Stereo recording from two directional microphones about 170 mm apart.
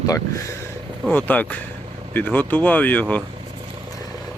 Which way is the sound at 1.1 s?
10° left (ahead or behind).